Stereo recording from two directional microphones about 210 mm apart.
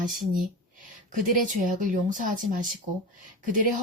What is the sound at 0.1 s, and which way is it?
Speech, 40° right (ahead or behind).